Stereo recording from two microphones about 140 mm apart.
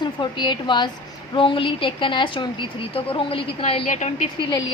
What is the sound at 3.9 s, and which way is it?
Speech, 60° left (ahead or behind).